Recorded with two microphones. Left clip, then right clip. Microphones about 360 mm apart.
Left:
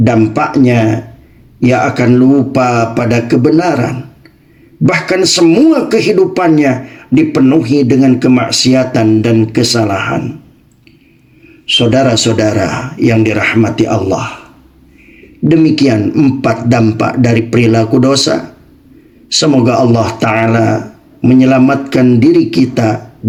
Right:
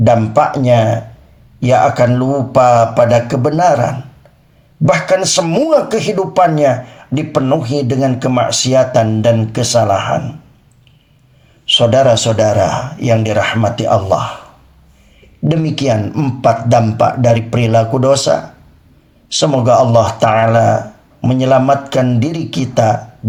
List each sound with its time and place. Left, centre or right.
0.0 s speech: right
5.1 s speech: right
11.7 s speech: right
15.4 s speech: right
19.5 s speech: right